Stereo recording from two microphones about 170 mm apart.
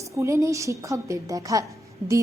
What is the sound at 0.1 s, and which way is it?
A woman's voice, 15° right (ahead or behind).